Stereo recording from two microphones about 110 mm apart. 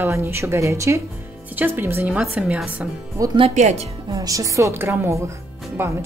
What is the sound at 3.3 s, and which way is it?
Speech, 75° right (ahead or behind).